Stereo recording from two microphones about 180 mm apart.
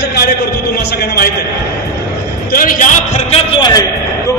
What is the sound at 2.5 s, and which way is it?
Speech, 50° left (ahead or behind).